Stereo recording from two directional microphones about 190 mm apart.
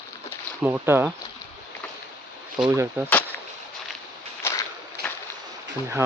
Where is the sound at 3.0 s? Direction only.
10° right (ahead or behind).